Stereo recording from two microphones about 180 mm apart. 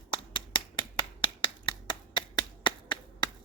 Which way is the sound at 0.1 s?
25° left (ahead or behind).